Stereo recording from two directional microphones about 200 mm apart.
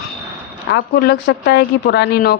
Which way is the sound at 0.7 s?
55° left (ahead or behind).